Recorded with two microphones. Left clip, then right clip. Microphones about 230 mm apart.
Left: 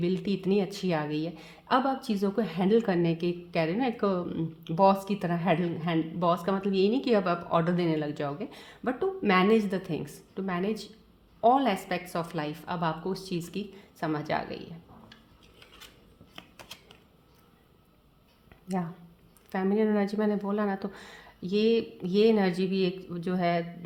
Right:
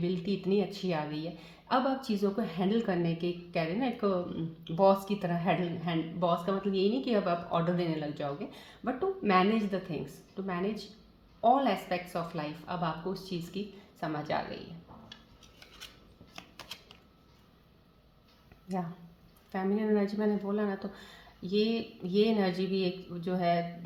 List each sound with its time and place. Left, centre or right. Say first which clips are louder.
0.0 s speech: left 3 dB; left
16.6 s typewriter: right 1 dB; centre
18.7 s speech: left 3 dB; left